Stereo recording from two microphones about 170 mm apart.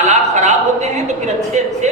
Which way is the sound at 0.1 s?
45° right (ahead or behind).